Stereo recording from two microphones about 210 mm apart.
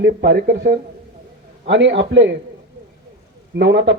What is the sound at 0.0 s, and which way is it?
A man's voice, 50° right (ahead or behind).